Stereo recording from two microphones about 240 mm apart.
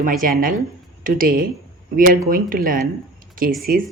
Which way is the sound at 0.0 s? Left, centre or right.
Right.